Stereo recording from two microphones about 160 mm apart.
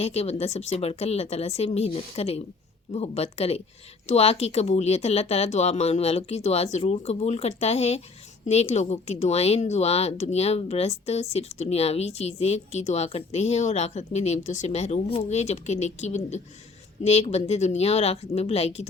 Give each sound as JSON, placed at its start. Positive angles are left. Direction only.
{"t": 0.0, "sound": "a woman's voice", "side_deg": 40}